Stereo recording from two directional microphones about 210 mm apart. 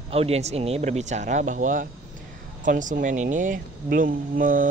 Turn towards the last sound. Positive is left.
turn(degrees=-40)  # may be behind; listen again after turning